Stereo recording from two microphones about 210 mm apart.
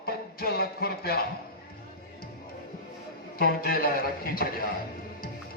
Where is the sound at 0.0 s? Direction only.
45° left (ahead or behind).